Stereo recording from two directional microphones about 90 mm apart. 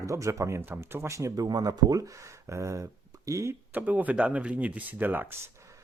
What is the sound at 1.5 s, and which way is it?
Speech, 50° right (ahead or behind).